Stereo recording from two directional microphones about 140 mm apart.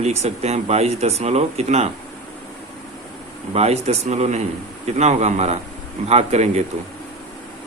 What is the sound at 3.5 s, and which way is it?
Speech, 50° right (ahead or behind).